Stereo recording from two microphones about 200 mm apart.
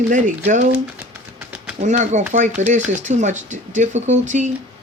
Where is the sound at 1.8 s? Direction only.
35° right (ahead or behind).